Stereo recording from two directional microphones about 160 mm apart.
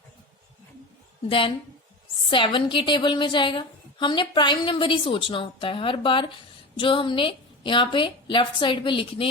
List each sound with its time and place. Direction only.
1.3 s a woman's voice: 35° left (ahead or behind)